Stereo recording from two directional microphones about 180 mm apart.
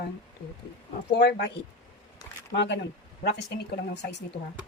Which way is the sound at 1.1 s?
70° left (ahead or behind).